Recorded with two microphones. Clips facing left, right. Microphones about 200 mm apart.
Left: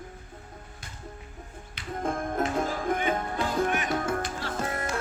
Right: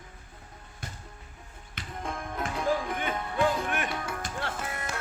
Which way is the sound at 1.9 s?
45° left (ahead or behind).